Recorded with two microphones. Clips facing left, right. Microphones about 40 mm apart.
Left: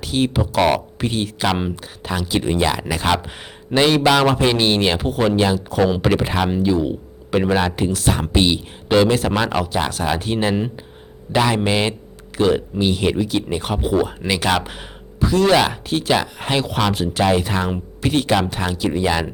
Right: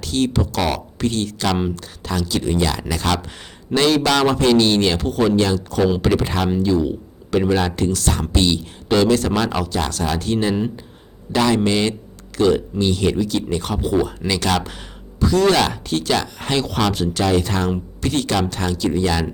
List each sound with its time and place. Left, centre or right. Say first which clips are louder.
0.0 s a man's voice: even; centre